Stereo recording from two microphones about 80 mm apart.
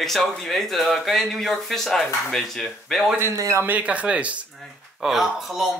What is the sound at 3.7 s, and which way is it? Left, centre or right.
Speech, centre.